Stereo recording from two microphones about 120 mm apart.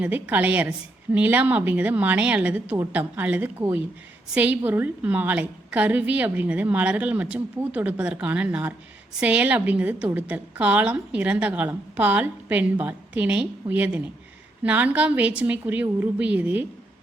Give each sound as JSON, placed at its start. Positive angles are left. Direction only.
{"t": 0.0, "sound": "a woman's voice", "side_deg": -15}